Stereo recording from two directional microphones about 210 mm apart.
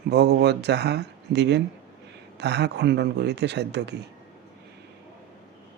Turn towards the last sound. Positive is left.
turn(degrees=-55)  # may be behind; listen again after turning